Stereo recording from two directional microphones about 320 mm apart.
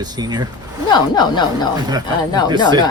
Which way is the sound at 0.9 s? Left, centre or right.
Centre.